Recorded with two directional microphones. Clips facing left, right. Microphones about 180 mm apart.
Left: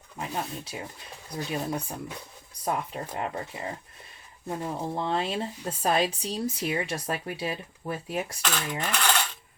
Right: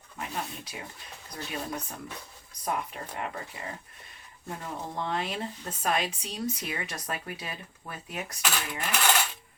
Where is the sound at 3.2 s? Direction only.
25° left (ahead or behind).